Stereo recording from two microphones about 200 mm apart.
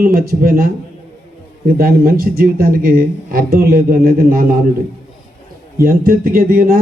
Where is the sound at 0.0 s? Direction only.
45° right (ahead or behind).